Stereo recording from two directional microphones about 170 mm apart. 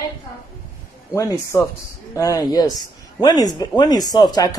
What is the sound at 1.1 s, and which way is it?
Speech, 20° left (ahead or behind).